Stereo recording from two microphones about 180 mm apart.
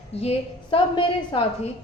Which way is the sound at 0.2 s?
30° left (ahead or behind).